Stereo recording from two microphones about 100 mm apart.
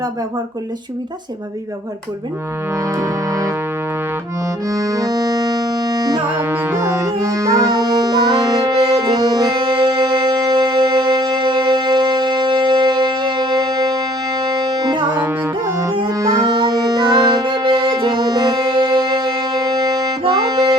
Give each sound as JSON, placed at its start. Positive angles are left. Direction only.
{"t": 2.7, "sound": "music", "side_deg": -30}
{"t": 4.7, "sound": "music", "side_deg": -35}
{"t": 6.3, "sound": "music", "side_deg": -25}
{"t": 15.1, "sound": "music", "side_deg": -20}
{"t": 16.0, "sound": "music", "side_deg": -40}